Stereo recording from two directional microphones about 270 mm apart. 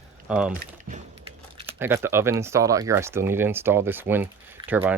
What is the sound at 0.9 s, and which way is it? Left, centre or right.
Typing, right.